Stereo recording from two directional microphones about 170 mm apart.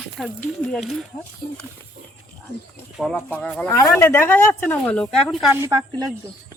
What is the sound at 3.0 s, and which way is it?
Speech, 5° left (ahead or behind).